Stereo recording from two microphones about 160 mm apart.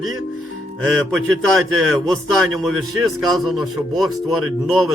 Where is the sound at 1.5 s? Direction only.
Centre (ahead or behind).